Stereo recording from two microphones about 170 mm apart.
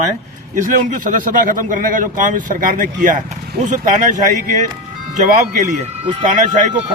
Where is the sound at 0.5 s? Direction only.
50° right (ahead or behind).